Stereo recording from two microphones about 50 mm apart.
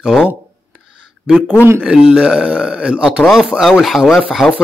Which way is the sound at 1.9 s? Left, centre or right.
Centre.